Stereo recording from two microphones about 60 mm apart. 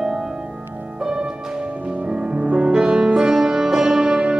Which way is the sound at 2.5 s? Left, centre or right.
Right.